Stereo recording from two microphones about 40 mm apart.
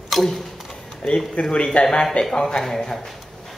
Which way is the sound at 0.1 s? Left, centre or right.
Centre.